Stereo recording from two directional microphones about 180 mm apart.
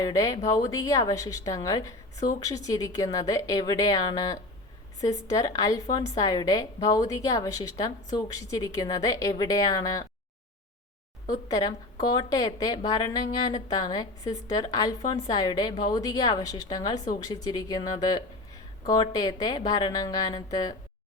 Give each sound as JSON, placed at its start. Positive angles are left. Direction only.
{"t": 0.0, "sound": "speech", "side_deg": 20}
{"t": 11.4, "sound": "speech", "side_deg": 20}